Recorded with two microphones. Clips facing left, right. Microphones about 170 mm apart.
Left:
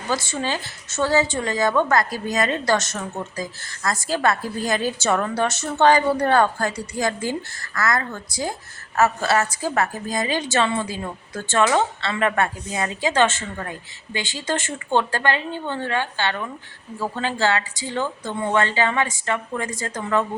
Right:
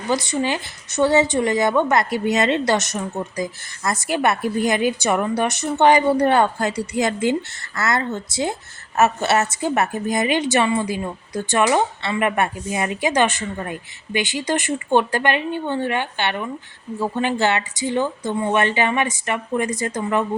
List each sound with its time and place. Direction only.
0.1 s a woman's voice: 20° right (ahead or behind)